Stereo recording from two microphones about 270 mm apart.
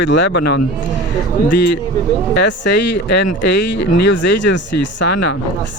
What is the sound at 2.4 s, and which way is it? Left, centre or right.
Speech, left.